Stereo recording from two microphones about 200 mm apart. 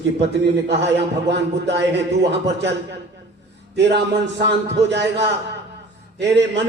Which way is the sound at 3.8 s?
60° right (ahead or behind).